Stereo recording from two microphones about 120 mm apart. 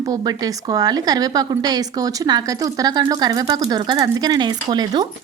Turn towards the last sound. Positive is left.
turn(degrees=-35)  # may be behind; listen again after turning